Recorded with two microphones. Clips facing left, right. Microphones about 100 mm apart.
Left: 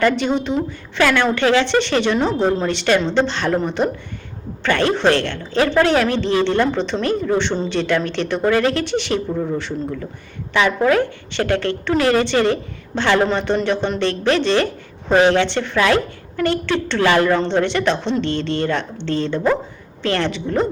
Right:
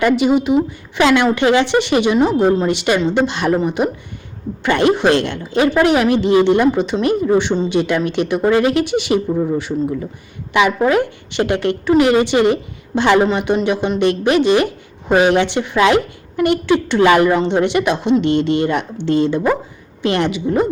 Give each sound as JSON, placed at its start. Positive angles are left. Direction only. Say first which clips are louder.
{"t": 0.0, "sound": "a woman's voice", "louder": "right 4 dB", "side_deg": -10}